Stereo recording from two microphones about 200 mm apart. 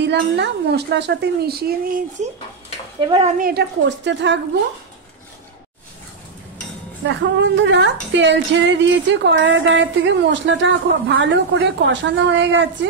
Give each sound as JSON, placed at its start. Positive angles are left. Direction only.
{"t": 0.0, "sound": "speech", "side_deg": -60}
{"t": 3.0, "sound": "speech", "side_deg": -20}
{"t": 3.3, "sound": "speech", "side_deg": -50}
{"t": 7.2, "sound": "speech", "side_deg": -65}